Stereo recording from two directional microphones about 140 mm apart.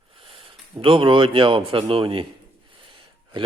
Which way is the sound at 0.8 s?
35° right (ahead or behind).